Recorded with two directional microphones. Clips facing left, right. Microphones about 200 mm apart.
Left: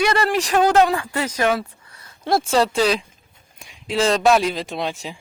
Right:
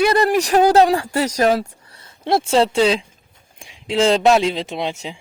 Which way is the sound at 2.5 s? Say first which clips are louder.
Right 3 dB; 25° right (ahead or behind).